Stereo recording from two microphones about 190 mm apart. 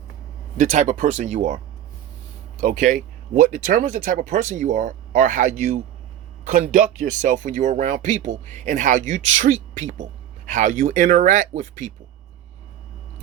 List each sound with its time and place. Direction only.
0.5 s speech: 40° right (ahead or behind)
7.0 s speech: 40° right (ahead or behind)